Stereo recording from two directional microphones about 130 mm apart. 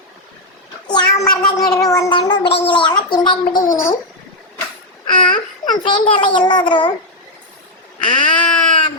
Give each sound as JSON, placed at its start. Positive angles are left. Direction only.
{"t": 0.9, "sound": "a child's voice", "side_deg": 35}
{"t": 3.7, "sound": "a child's voice", "side_deg": 25}
{"t": 5.0, "sound": "a child's voice", "side_deg": 40}
{"t": 8.0, "sound": "speech", "side_deg": 40}